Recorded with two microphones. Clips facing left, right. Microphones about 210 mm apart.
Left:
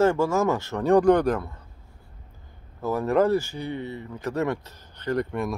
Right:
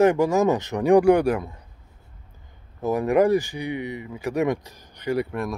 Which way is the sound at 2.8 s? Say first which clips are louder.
Right 2 dB; 15° right (ahead or behind).